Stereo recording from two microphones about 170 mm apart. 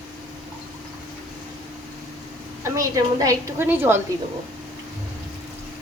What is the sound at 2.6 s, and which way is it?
A woman's voice, 20° right (ahead or behind).